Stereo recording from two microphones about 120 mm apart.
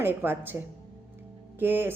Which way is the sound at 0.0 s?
15° right (ahead or behind).